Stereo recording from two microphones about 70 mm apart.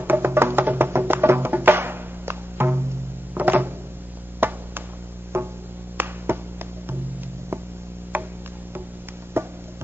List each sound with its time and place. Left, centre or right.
0.0 s music: right
4.4 s a sound: right
5.3 s music: right
6.0 s finger snapping: right
8.1 s a sound: right
9.4 s music: right